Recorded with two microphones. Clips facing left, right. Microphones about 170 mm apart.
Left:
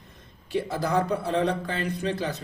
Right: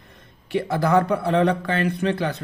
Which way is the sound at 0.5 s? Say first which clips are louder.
Right 6 dB; 65° right (ahead or behind).